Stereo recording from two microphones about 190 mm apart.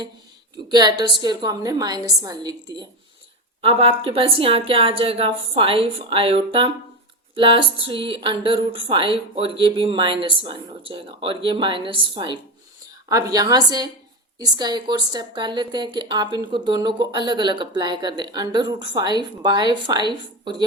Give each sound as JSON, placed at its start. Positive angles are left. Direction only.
{"t": 0.7, "sound": "a woman's voice", "side_deg": -20}
{"t": 3.6, "sound": "a woman's voice", "side_deg": -30}